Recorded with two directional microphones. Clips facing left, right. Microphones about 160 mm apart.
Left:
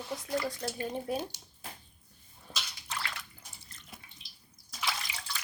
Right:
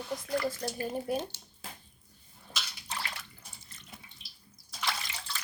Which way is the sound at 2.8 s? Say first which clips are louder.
Even; 25° right (ahead or behind).